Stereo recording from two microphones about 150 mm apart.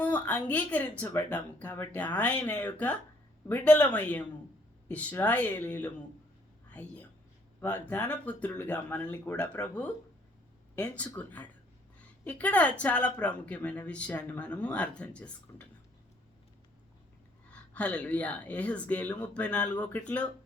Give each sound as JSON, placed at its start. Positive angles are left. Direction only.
{"t": 0.0, "sound": "speech", "side_deg": 10}
{"t": 11.2, "sound": "speech", "side_deg": 10}
{"t": 17.5, "sound": "speech", "side_deg": 10}